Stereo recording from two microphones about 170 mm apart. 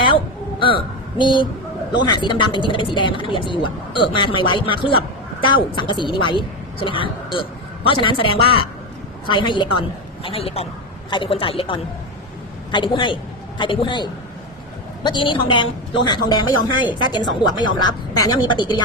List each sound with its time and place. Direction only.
1.2 s speech: 30° left (ahead or behind)